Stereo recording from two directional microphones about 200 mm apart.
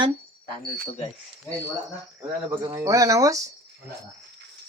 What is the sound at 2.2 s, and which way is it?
Speech, 15° right (ahead or behind).